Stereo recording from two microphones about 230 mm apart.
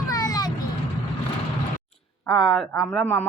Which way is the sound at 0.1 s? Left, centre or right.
Centre.